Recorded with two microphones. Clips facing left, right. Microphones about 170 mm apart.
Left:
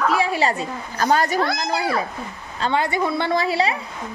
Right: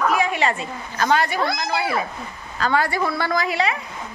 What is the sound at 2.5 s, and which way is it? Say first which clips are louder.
A woman's voice: even; 25° left (ahead or behind).